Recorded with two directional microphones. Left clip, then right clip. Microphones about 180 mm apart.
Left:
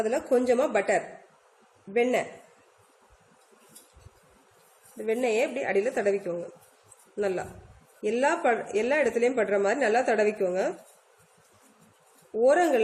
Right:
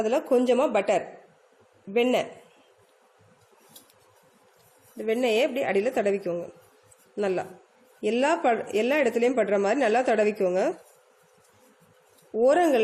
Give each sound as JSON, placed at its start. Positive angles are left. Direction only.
{"t": 0.0, "sound": "a woman's voice", "side_deg": -45}
{"t": 1.9, "sound": "a woman's voice", "side_deg": -45}
{"t": 4.9, "sound": "a woman's voice", "side_deg": -45}
{"t": 12.4, "sound": "a woman's voice", "side_deg": -50}